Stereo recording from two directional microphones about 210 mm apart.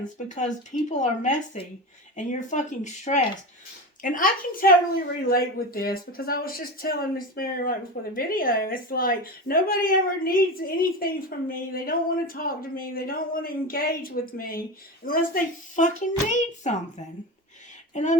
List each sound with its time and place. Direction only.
0.3 s a child's voice: 35° left (ahead or behind)
17.9 s speech: 35° left (ahead or behind)